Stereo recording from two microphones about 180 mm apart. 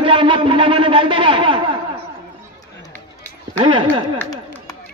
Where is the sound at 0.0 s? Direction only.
30° right (ahead or behind).